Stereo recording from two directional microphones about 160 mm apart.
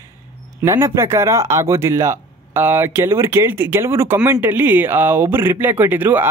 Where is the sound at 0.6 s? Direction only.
15° right (ahead or behind).